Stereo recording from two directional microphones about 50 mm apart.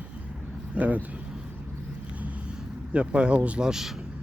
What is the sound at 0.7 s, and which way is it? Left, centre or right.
Vehicle, right.